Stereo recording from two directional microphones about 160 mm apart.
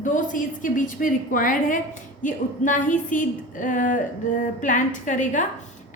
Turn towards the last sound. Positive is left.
turn(degrees=50)  # may be behind; listen again after turning